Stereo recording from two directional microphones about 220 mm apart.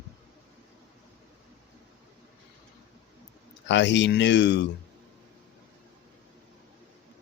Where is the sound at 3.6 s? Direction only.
55° left (ahead or behind).